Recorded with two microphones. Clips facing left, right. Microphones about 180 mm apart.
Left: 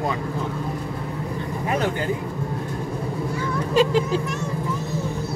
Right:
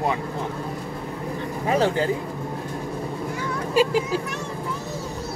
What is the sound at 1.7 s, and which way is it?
Speech, 30° right (ahead or behind).